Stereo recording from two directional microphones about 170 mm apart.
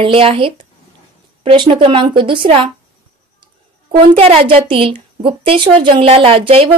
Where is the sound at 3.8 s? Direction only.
35° right (ahead or behind).